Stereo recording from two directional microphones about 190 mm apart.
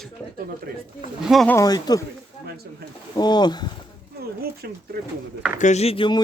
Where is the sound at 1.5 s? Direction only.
20° left (ahead or behind).